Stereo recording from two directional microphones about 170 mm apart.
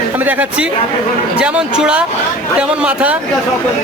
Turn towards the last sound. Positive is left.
turn(degrees=-10)  # may be behind; listen again after turning